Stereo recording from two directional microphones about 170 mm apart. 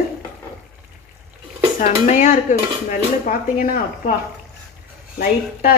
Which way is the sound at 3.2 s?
55° left (ahead or behind).